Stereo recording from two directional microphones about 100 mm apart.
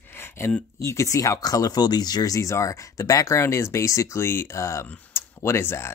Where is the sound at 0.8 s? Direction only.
30° left (ahead or behind).